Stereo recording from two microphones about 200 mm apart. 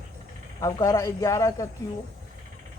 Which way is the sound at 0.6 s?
20° left (ahead or behind).